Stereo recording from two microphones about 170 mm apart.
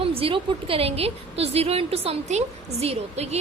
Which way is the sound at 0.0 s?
35° right (ahead or behind).